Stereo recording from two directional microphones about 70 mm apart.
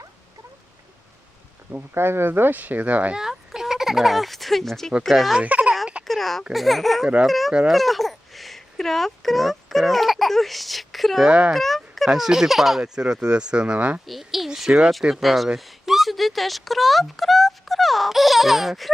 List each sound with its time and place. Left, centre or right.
1.7 s speech: right
3.2 s speech: centre
5.4 s speech: centre
6.1 s a sound: centre
6.5 s speech: centre
11.3 s speech: centre
11.5 s speech: centre
14.1 s speech: centre